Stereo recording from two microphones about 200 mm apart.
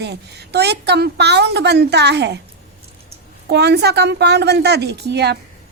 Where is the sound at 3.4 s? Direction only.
55° right (ahead or behind).